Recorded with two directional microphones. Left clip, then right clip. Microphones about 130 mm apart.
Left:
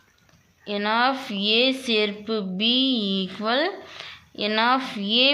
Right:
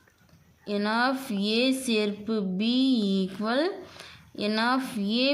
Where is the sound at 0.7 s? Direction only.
35° right (ahead or behind).